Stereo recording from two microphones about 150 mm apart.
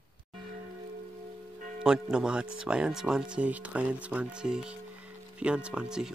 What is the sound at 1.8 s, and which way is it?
Speech, 5° right (ahead or behind).